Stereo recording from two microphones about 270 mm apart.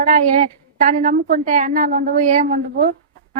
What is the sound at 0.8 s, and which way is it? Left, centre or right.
A woman's voice, right.